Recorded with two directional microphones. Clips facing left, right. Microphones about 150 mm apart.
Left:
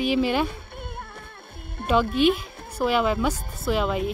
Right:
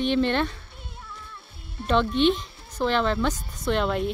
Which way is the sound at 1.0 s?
60° left (ahead or behind).